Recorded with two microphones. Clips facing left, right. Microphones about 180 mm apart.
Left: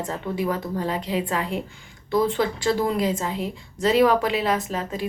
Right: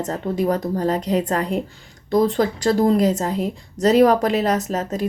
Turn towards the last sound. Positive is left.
turn(degrees=-40)  # may be behind; listen again after turning